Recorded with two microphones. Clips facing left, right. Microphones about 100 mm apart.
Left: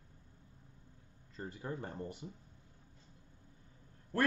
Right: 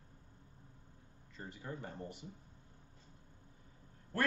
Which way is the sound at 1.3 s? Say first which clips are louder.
Left 4 dB; 40° left (ahead or behind).